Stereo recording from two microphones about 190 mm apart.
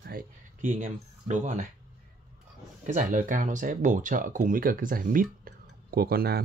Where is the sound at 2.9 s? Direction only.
45° right (ahead or behind).